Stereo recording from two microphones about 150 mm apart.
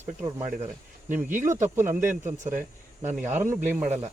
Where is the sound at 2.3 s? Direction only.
55° right (ahead or behind).